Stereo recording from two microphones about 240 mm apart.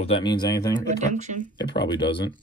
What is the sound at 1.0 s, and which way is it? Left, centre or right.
Speech, right.